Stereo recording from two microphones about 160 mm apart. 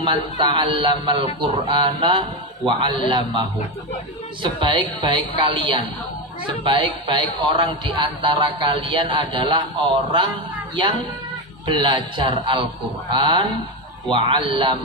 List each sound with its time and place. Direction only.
0.0 s a man's voice: 30° right (ahead or behind)
11.6 s a man's voice: 30° right (ahead or behind)